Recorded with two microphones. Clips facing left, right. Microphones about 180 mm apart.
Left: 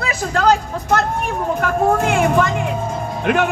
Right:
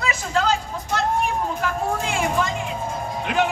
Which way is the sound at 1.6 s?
60° left (ahead or behind).